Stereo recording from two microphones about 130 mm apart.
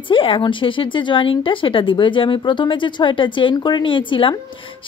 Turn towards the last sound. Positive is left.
turn(degrees=40)  # may be behind; listen again after turning